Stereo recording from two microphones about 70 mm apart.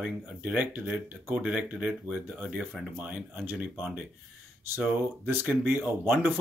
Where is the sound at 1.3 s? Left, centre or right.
Centre.